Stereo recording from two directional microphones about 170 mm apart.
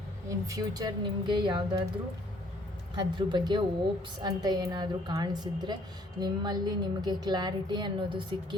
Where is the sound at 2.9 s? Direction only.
25° right (ahead or behind).